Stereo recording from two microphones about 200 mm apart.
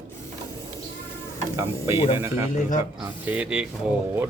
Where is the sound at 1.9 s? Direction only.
30° left (ahead or behind).